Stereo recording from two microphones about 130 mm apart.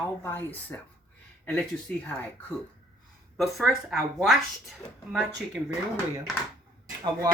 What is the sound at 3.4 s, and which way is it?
Speech, centre (ahead or behind).